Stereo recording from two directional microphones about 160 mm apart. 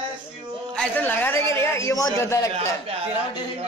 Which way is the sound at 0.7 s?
10° left (ahead or behind).